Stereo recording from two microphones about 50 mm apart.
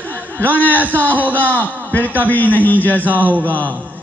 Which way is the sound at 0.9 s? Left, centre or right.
Right.